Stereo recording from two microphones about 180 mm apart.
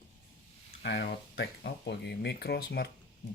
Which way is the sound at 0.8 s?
70° left (ahead or behind).